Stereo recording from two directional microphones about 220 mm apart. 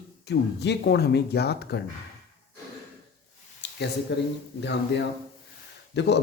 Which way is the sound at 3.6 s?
50° left (ahead or behind).